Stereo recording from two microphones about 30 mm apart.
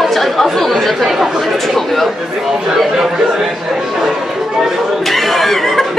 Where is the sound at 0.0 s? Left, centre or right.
Centre.